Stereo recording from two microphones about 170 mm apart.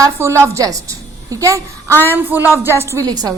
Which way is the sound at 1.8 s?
10° left (ahead or behind).